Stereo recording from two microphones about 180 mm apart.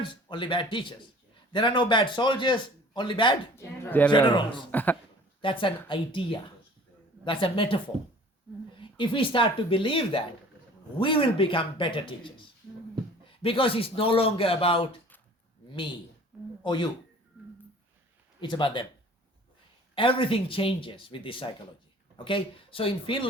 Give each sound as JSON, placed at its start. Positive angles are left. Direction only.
{"t": 0.0, "sound": "a man's voice", "side_deg": 25}
{"t": 3.5, "sound": "speech", "side_deg": 10}
{"t": 4.1, "sound": "a man's voice", "side_deg": 25}
{"t": 4.7, "sound": "speech", "side_deg": 10}
{"t": 5.4, "sound": "a man's voice", "side_deg": 30}
{"t": 8.8, "sound": "a man's voice", "side_deg": 30}
{"t": 16.3, "sound": "a sound", "side_deg": -5}
{"t": 16.6, "sound": "a man's voice", "side_deg": 25}
{"t": 18.3, "sound": "a man's voice", "side_deg": 25}
{"t": 20.0, "sound": "a man's voice", "side_deg": 30}